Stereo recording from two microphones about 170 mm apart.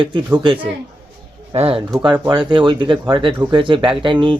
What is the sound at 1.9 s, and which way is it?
Speech, 20° right (ahead or behind).